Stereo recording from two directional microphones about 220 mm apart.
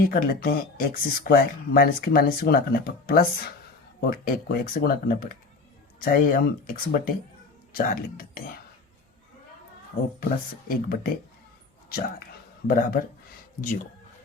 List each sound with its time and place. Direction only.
0.0 s speech: 40° left (ahead or behind)
10.2 s speech: 40° left (ahead or behind)